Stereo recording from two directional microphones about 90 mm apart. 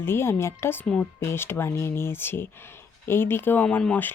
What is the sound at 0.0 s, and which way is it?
Speech, 25° left (ahead or behind).